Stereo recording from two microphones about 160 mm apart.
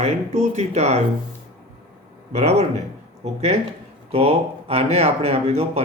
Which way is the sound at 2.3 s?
45° right (ahead or behind).